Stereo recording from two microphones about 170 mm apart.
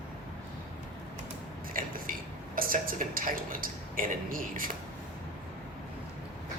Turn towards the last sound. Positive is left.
turn(degrees=-55)  # may be behind; listen again after turning